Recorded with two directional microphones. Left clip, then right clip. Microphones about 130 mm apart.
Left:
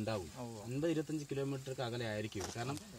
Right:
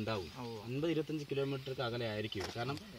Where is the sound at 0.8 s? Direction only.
25° left (ahead or behind).